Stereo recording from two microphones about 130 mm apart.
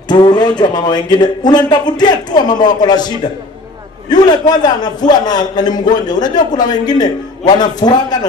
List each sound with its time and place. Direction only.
0.1 s speech: 35° left (ahead or behind)
4.1 s speech: 30° left (ahead or behind)